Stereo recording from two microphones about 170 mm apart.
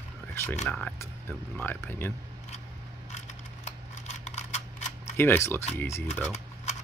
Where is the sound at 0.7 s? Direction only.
5° left (ahead or behind).